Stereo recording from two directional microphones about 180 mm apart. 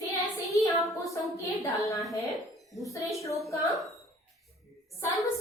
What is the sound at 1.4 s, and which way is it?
Speech, 15° left (ahead or behind).